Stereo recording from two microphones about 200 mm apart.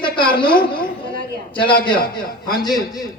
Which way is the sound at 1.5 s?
25° left (ahead or behind).